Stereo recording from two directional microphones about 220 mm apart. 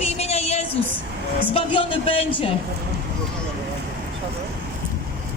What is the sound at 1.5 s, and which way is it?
Speech, 25° left (ahead or behind).